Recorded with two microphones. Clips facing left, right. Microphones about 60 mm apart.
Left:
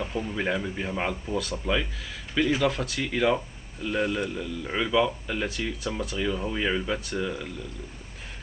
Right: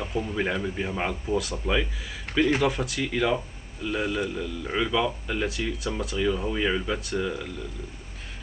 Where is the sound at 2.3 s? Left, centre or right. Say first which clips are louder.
Right 2 dB; right.